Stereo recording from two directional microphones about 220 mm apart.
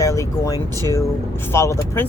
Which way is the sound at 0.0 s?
15° left (ahead or behind).